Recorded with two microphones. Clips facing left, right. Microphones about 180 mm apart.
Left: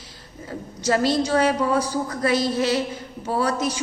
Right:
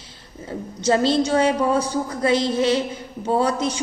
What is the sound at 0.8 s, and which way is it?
A woman's voice, 25° right (ahead or behind).